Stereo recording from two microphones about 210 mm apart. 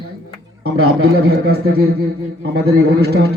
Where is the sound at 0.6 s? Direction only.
90° right.